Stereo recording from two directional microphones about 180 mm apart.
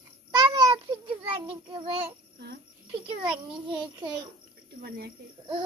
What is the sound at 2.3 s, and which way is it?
Speech, 65° right (ahead or behind).